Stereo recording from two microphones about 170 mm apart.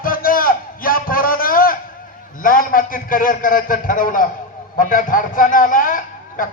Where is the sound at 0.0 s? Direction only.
55° left (ahead or behind).